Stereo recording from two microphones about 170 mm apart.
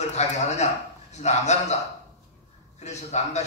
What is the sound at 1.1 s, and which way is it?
Speech, 40° left (ahead or behind).